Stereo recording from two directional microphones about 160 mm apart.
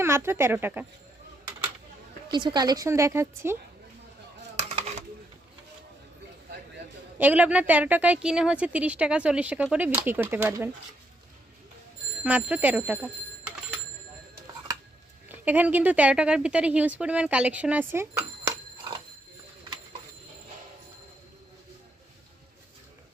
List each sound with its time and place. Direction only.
0.0 s a woman's voice: 15° right (ahead or behind)
2.3 s a woman's voice: 30° right (ahead or behind)
7.2 s a woman's voice: 10° right (ahead or behind)
12.2 s a woman's voice: 10° right (ahead or behind)
15.3 s a woman's voice: 10° right (ahead or behind)